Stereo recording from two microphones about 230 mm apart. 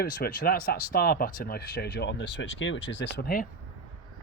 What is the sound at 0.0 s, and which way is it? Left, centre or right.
Speech, left.